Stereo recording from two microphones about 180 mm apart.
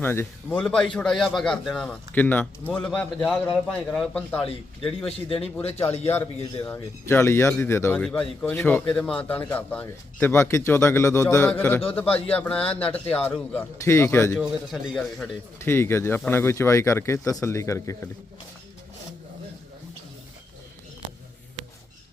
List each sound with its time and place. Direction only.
0.0 s a man's voice: 10° left (ahead or behind)
4.9 s a man's voice: 30° left (ahead or behind)
6.1 s speech: 10° left (ahead or behind)
14.4 s a man's voice: centre (ahead or behind)
15.5 s speech: 15° left (ahead or behind)